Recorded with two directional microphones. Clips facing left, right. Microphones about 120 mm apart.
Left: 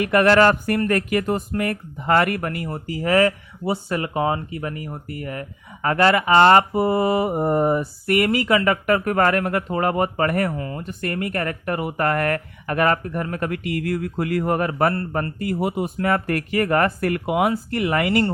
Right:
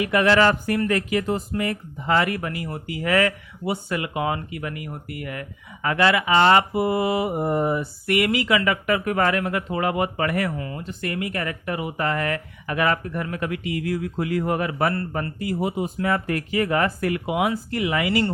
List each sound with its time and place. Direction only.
0.0 s speech: 50° left (ahead or behind)
2.6 s speech: 40° left (ahead or behind)